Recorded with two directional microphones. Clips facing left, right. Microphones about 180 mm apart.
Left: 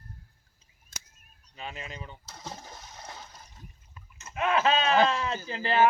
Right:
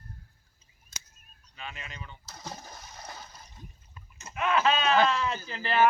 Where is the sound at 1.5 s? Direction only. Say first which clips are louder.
Left 3 dB; 35° left (ahead or behind).